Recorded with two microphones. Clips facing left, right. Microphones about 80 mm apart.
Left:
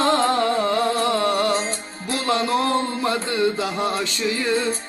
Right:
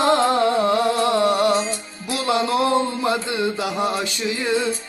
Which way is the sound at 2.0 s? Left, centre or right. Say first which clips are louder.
Right 1 dB; centre.